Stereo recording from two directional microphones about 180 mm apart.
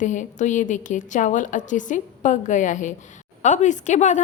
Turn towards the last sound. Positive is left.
turn(degrees=40)  # may be behind; listen again after turning